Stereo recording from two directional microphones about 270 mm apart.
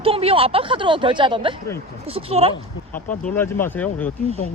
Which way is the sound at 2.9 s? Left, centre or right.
Left.